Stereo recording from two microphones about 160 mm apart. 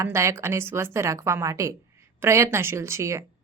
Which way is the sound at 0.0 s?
20° right (ahead or behind).